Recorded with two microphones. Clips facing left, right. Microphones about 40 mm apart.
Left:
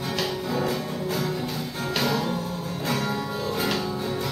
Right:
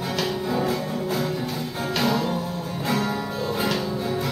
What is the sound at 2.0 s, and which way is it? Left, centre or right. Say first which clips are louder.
Music: right 3 dB; centre.